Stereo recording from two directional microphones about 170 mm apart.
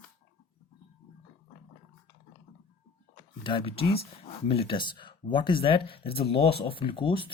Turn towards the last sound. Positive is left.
turn(degrees=30)  # may be behind; listen again after turning